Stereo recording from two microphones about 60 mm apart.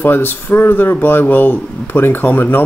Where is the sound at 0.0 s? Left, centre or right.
Left.